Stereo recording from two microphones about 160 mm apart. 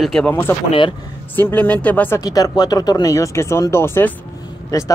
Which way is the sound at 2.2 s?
20° left (ahead or behind).